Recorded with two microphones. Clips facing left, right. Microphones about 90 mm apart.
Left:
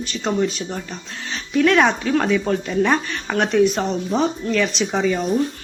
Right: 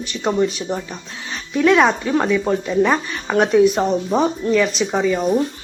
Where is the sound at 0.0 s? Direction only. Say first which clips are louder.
Right 2 dB; 5° right (ahead or behind).